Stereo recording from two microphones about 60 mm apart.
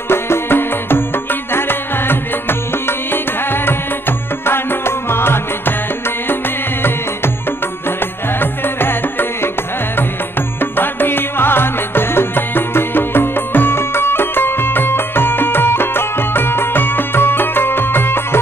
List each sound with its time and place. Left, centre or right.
0.1 s music: left
4.5 s music: left
8.4 s music: left
10.6 s music: left